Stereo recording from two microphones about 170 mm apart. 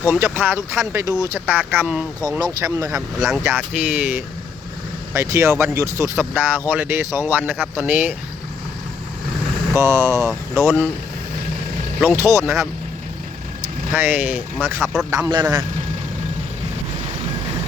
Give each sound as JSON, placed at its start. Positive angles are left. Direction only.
{"t": 0.0, "sound": "speech", "side_deg": -10}
{"t": 2.4, "sound": "speech", "side_deg": -20}
{"t": 3.2, "sound": "speech", "side_deg": 0}
{"t": 9.7, "sound": "speech", "side_deg": -15}
{"t": 12.0, "sound": "speech", "side_deg": -15}
{"t": 13.9, "sound": "speech", "side_deg": -10}